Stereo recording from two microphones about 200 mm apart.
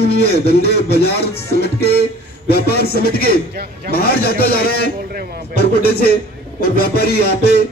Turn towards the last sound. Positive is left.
turn(degrees=55)  # may be behind; listen again after turning